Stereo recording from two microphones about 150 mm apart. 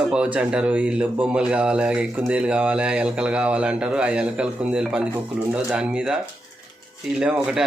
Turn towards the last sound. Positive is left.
turn(degrees=-5)  # may be behind; listen again after turning